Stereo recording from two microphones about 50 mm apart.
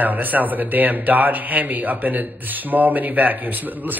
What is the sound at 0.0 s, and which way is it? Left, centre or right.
Speech, right.